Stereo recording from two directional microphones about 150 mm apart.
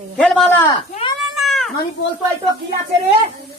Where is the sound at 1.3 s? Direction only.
Centre (ahead or behind).